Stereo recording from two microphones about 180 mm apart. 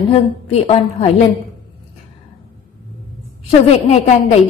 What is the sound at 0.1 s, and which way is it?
A woman's voice, 35° left (ahead or behind).